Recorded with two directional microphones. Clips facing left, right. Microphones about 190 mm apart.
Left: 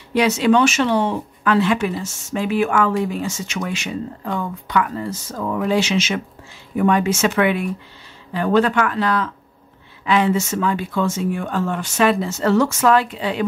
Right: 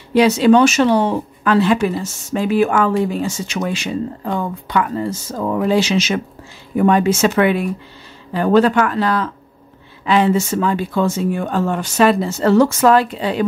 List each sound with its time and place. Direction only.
0.1 s speech: 35° right (ahead or behind)